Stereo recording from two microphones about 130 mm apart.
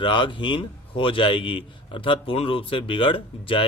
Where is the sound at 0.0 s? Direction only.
40° left (ahead or behind).